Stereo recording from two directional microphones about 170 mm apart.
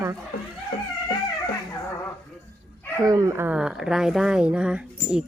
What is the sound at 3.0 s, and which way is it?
Speech, 20° right (ahead or behind).